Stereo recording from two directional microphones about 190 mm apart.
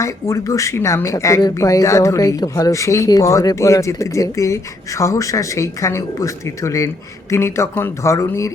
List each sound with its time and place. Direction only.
0.0 s speech: 15° left (ahead or behind)